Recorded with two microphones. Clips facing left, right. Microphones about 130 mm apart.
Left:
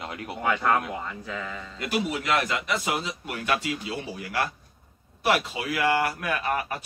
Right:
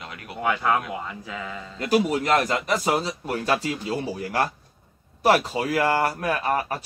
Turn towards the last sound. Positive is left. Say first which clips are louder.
# right 3 dB
turn(degrees=-35)  # may be behind; listen again after turning